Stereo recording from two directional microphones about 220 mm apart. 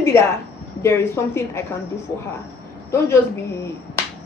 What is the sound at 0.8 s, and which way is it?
Speech, 10° left (ahead or behind).